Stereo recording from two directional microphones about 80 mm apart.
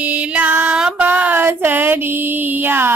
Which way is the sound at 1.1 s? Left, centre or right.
Right.